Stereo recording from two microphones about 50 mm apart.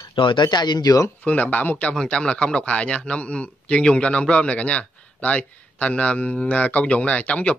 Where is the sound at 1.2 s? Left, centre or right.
Left.